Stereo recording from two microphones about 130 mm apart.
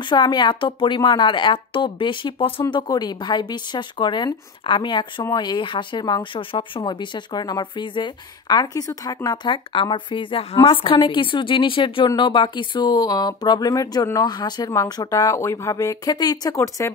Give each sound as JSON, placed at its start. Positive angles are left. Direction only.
{"t": 0.1, "sound": "speech", "side_deg": 35}